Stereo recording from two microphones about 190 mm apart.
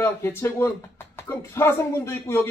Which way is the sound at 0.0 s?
15° left (ahead or behind).